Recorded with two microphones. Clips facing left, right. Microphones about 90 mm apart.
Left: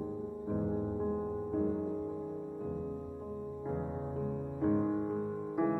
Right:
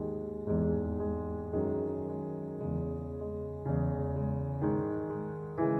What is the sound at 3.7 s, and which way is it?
Music, 35° right (ahead or behind).